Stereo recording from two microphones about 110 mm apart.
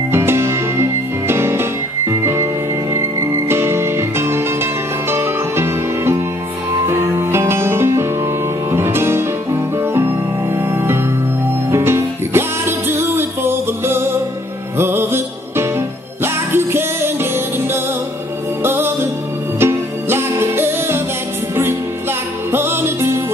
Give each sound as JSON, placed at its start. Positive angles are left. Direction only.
{"t": 0.1, "sound": "music", "side_deg": -20}
{"t": 22.5, "sound": "music", "side_deg": -20}